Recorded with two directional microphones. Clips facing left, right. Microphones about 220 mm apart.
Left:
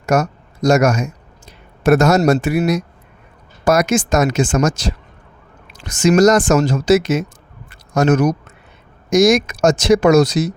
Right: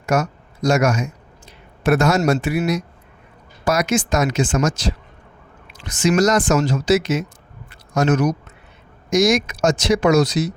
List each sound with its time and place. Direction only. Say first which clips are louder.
0.0 s speech: left 3 dB; 45° left (ahead or behind)
7.7 s a sound: left 3 dB; 45° left (ahead or behind)
9.0 s speech: left 4 dB; 45° left (ahead or behind)